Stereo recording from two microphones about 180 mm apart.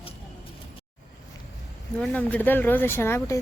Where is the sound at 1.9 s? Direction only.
10° left (ahead or behind).